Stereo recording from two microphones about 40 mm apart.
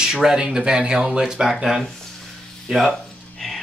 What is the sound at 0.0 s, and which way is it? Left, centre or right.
Speech, centre.